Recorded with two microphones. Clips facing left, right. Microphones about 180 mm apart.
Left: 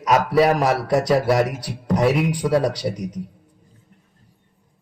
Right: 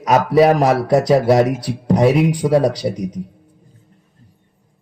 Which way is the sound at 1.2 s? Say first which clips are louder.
Right 5 dB; 25° right (ahead or behind).